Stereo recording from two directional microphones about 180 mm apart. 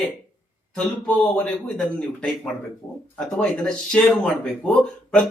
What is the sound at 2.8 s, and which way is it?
Speech, 15° left (ahead or behind).